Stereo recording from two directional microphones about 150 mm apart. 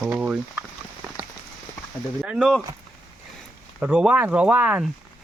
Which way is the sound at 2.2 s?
5° right (ahead or behind).